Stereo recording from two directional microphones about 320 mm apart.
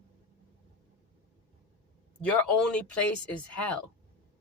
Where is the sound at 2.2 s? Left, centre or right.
Centre.